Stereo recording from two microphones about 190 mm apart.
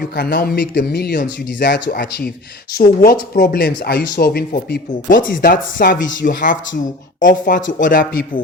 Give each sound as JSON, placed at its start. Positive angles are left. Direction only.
{"t": 0.2, "sound": "speech", "side_deg": 50}